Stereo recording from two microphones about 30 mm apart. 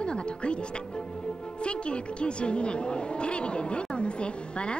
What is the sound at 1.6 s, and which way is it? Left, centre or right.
A woman's voice, left.